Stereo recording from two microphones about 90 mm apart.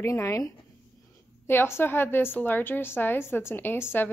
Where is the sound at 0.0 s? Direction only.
35° left (ahead or behind).